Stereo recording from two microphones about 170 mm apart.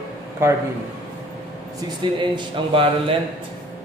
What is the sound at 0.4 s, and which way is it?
Speech, 15° right (ahead or behind).